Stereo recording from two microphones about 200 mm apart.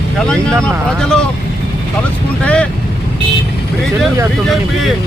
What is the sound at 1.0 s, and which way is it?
Speech, 5° left (ahead or behind).